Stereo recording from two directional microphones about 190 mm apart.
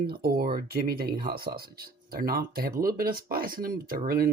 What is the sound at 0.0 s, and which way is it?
Speech, 55° right (ahead or behind).